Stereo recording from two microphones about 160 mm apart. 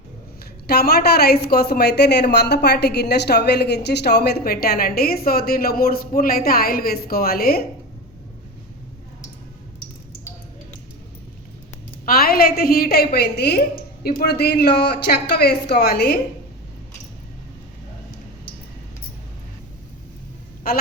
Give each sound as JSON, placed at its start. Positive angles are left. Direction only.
{"t": 0.7, "sound": "a woman's voice", "side_deg": 80}
{"t": 12.0, "sound": "a woman's voice", "side_deg": 70}
{"t": 14.0, "sound": "speech", "side_deg": 75}